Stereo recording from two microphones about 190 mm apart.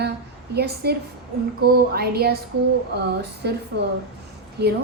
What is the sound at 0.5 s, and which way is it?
A woman's voice, 60° right (ahead or behind).